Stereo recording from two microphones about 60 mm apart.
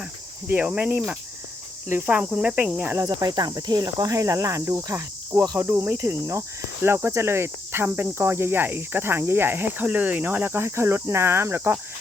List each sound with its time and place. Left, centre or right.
0.4 s speech: right
2.0 s cricket: right
3.0 s cricket: right
5.3 s cricket: right
6.0 s speech: right